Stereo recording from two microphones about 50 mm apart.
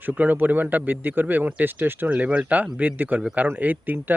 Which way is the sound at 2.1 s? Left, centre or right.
Right.